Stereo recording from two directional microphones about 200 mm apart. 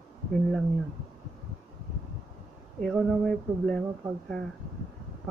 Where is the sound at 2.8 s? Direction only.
Centre (ahead or behind).